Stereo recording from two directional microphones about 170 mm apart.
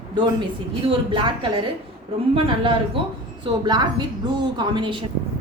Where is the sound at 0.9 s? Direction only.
30° right (ahead or behind).